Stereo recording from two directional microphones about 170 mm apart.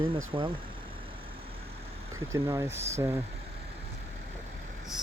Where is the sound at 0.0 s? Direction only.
30° right (ahead or behind).